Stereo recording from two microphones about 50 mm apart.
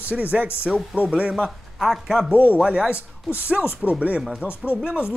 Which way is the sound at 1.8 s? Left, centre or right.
Centre.